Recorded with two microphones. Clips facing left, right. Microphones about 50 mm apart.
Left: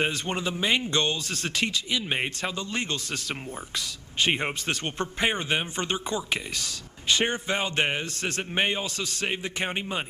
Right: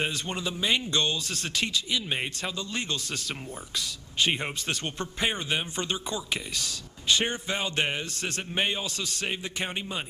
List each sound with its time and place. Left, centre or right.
0.0 s a man's voice: left
2.0 s speech: left
2.6 s a man's voice: left